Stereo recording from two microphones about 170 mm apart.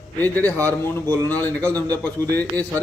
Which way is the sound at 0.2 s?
10° left (ahead or behind).